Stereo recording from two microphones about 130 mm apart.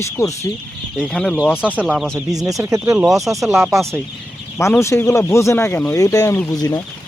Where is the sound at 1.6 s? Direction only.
10° right (ahead or behind).